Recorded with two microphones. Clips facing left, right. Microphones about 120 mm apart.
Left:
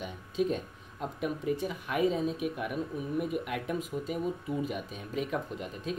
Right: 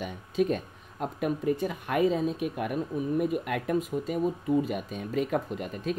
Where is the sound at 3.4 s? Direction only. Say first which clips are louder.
Right 5 dB; 55° right (ahead or behind).